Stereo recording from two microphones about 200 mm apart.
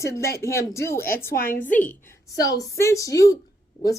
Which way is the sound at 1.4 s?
45° left (ahead or behind).